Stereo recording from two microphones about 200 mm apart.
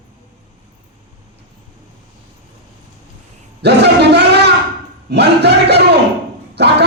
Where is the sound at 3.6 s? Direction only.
55° right (ahead or behind).